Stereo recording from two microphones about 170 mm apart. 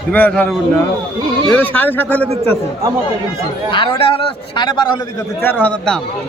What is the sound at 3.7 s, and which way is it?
A man's voice, 30° left (ahead or behind).